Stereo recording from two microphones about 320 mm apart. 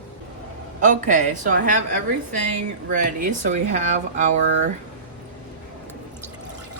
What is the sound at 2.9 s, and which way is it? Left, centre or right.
Speech, right.